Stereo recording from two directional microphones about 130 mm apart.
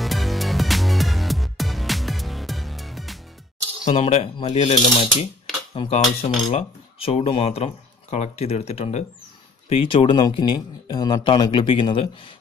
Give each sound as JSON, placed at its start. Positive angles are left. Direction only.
{"t": 0.0, "sound": "music", "side_deg": 0}
{"t": 3.9, "sound": "speech", "side_deg": 50}
{"t": 4.8, "sound": "speech", "side_deg": 35}
{"t": 5.8, "sound": "cutlery", "side_deg": 55}
{"t": 6.5, "sound": "speech", "side_deg": 50}
{"t": 9.9, "sound": "speech", "side_deg": 35}